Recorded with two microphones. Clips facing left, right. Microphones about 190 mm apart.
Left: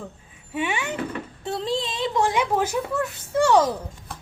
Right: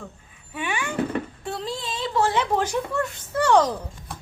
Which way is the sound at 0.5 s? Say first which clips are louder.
Left 1 dB; 25° left (ahead or behind).